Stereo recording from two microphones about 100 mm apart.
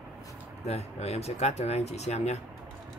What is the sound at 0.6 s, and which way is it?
Speech, 90° left.